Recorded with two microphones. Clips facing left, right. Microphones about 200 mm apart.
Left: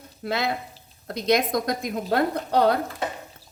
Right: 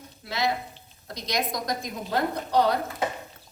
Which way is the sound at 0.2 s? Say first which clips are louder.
Left 2 dB; 55° left (ahead or behind).